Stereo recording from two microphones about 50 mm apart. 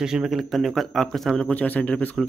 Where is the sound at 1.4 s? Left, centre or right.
Left.